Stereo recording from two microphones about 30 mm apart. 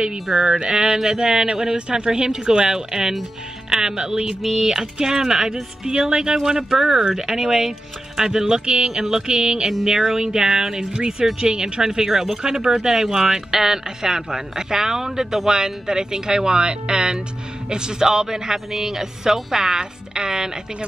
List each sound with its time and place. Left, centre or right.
0.6 s speech: right
4.4 s speech: centre; by 8.8 s right
8.8 s speech: centre
9.3 s speech: right
9.7 s speech: centre
10.8 s speech: right